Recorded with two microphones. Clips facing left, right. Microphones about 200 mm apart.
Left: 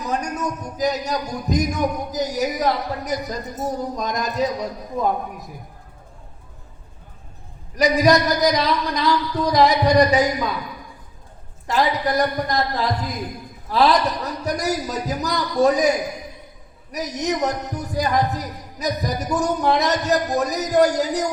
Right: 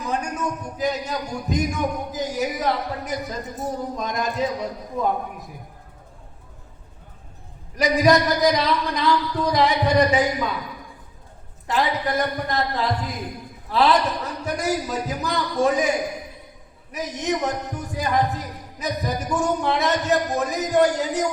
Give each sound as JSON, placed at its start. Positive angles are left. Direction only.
{"t": 0.0, "sound": "a man's voice", "side_deg": 40}
{"t": 7.8, "sound": "a man's voice", "side_deg": 40}
{"t": 11.7, "sound": "a man's voice", "side_deg": 40}